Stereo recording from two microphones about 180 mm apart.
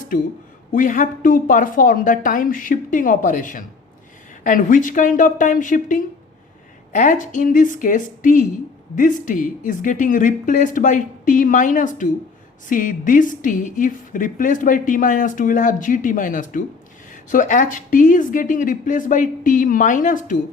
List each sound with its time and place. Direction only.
0.7 s a woman's voice: 45° left (ahead or behind)